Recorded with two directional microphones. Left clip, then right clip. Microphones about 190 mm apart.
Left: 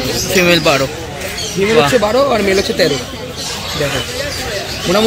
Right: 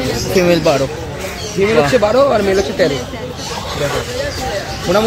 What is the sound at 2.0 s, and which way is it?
Speech, 40° left (ahead or behind).